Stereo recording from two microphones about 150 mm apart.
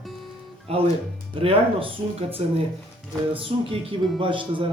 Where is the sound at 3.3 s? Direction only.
35° right (ahead or behind).